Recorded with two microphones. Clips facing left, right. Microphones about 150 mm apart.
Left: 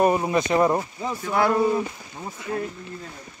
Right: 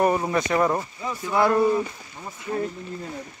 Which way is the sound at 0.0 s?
20° left (ahead or behind).